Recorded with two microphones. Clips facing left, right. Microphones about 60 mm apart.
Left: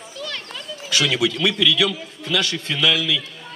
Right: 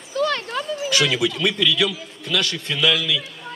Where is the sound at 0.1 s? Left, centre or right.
Right.